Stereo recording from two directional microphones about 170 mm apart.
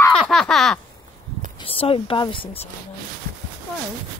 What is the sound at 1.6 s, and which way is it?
Speech, 35° left (ahead or behind).